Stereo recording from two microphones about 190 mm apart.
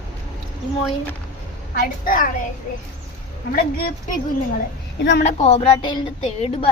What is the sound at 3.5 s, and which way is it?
Speech, 50° left (ahead or behind).